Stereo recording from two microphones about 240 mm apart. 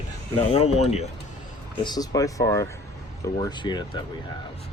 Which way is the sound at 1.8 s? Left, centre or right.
Centre.